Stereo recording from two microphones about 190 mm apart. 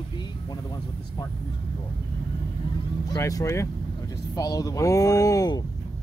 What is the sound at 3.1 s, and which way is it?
Speech, 15° left (ahead or behind).